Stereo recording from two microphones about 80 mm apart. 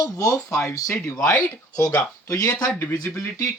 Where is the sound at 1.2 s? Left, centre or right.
Centre.